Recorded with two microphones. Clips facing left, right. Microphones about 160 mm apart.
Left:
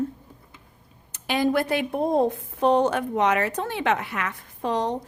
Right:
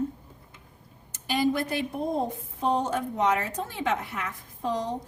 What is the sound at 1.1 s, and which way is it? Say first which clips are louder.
Speech: left 2 dB; 65° left (ahead or behind).